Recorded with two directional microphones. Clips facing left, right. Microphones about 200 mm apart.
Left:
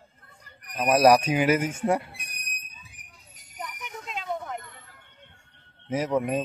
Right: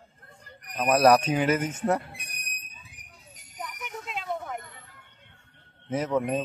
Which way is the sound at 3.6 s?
Centre (ahead or behind).